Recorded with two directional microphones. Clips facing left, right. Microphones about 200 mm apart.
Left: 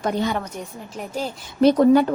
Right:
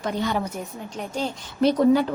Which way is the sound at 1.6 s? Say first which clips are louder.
Left 4 dB; 50° left (ahead or behind).